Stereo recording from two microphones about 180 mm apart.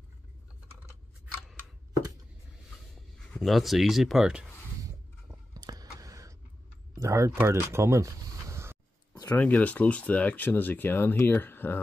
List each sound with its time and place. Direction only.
3.3 s speech: centre (ahead or behind)
5.5 s a sound: 20° right (ahead or behind)
7.0 s speech: 15° right (ahead or behind)
9.2 s speech: 10° left (ahead or behind)